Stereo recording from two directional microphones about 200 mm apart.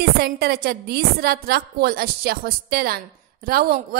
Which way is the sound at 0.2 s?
50° right (ahead or behind).